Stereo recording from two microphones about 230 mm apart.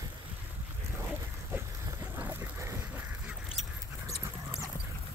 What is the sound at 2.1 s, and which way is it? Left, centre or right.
Duck, centre.